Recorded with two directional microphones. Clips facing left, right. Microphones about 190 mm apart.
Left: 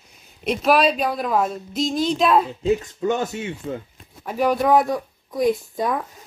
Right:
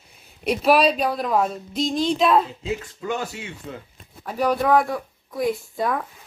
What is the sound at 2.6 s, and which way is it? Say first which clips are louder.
Speech: left 8 dB; 40° left (ahead or behind).